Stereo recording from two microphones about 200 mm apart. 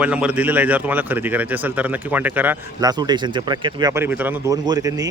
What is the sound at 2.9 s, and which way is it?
Speech, 20° right (ahead or behind).